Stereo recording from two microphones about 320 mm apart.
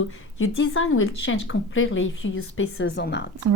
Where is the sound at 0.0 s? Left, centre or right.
Left.